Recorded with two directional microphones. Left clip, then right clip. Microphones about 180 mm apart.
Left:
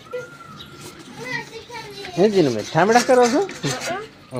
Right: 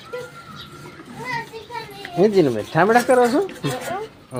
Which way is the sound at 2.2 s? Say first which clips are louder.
Right 1 dB; 15° left (ahead or behind).